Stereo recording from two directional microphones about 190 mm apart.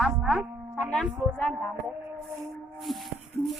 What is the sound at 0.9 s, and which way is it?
Speech, 5° left (ahead or behind).